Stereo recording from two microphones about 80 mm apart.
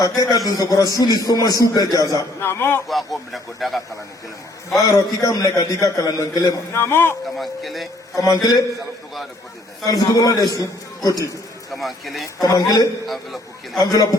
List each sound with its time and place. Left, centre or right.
0.2 s a man's voice: left
2.4 s a man's voice: left
2.9 s speech: centre
4.8 s a man's voice: left
6.8 s speech: left
7.3 s speech: centre
8.1 s a man's voice: left
9.8 s a man's voice: left
11.7 s speech: centre
12.4 s a man's voice: left